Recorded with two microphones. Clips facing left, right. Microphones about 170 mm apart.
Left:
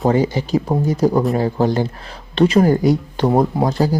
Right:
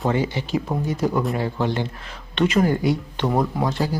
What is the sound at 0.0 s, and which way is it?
Speech, 40° left (ahead or behind).